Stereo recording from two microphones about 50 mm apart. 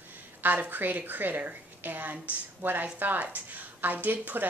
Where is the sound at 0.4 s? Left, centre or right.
Right.